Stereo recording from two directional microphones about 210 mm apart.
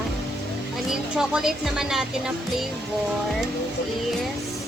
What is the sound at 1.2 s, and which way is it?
Speech, centre (ahead or behind).